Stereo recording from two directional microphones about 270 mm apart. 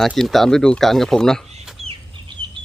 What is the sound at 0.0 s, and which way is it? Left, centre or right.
Speech, centre.